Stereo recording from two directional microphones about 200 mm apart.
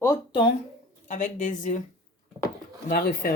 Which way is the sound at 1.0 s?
40° left (ahead or behind).